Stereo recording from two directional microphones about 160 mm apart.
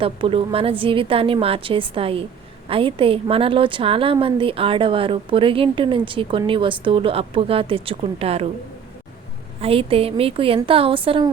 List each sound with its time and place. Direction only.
0.0 s a woman's voice: 35° right (ahead or behind)
9.6 s a woman's voice: 35° right (ahead or behind)